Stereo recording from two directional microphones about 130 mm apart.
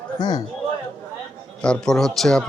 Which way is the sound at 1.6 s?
5° left (ahead or behind).